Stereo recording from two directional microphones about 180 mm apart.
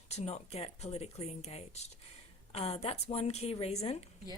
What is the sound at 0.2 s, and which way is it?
A woman's voice, 35° left (ahead or behind).